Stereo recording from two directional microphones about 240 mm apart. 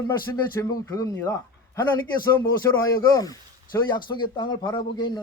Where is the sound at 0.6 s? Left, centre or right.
Centre.